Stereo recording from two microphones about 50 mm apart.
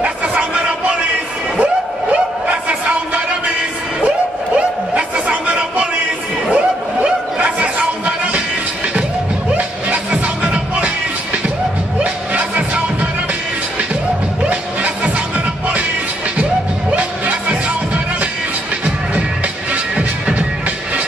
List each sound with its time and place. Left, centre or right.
0.0 s a sound: right
4.6 s a sound: right
9.6 s music: right
12.0 s music: right
14.4 s music: right
16.9 s music: right
19.7 s music: right